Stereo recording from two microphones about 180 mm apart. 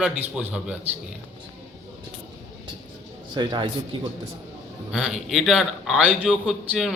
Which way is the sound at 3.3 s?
25° right (ahead or behind).